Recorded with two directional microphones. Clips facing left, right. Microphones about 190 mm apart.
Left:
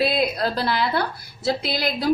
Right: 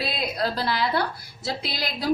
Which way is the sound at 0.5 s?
55° left (ahead or behind).